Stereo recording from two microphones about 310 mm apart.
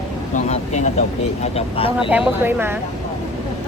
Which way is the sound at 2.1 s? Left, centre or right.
Centre.